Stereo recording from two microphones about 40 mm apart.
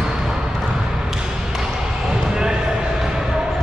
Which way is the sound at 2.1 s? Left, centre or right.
Centre.